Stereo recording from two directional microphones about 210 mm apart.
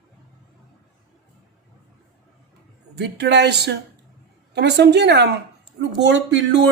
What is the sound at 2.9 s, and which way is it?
Speech, 50° right (ahead or behind).